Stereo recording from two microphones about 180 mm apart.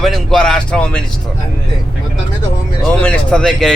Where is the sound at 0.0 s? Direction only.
Centre (ahead or behind).